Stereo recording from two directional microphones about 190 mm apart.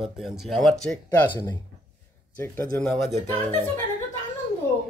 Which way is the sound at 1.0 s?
15° left (ahead or behind).